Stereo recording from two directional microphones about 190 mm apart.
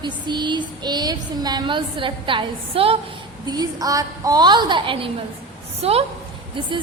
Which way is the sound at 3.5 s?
20° right (ahead or behind).